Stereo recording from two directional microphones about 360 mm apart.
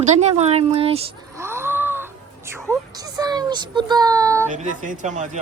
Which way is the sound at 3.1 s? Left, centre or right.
Centre.